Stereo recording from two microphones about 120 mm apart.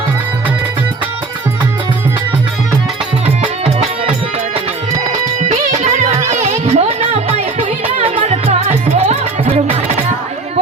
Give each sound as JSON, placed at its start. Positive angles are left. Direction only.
{"t": 5.5, "sound": "music", "side_deg": -65}